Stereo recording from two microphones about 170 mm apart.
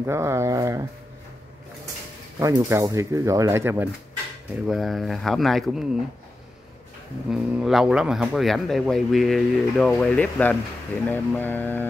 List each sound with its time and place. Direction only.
0.0 s speech: 15° right (ahead or behind)
2.4 s speech: 20° right (ahead or behind)
4.6 s speech: centre (ahead or behind)
7.2 s speech: centre (ahead or behind)